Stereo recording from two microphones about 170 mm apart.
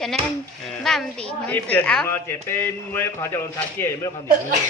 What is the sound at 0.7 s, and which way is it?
A woman's voice, centre (ahead or behind).